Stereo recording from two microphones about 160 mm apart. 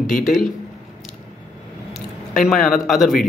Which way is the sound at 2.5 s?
60° left (ahead or behind).